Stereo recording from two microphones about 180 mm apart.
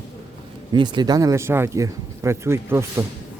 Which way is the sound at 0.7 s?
25° right (ahead or behind).